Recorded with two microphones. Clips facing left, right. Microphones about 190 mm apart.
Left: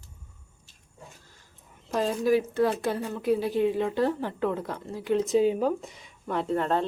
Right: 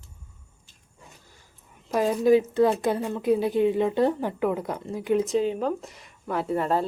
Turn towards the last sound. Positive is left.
turn(degrees=-5)  # may be behind; listen again after turning